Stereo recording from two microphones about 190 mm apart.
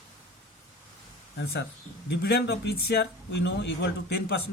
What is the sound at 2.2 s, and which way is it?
Speech, 60° left (ahead or behind).